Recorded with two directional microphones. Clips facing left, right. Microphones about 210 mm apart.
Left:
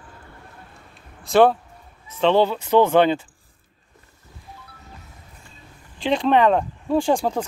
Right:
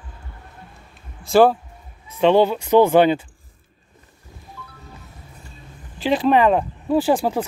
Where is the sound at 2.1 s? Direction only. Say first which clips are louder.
Right 3 dB; 10° right (ahead or behind).